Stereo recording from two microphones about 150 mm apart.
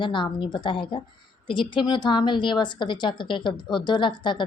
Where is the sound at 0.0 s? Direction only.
30° left (ahead or behind).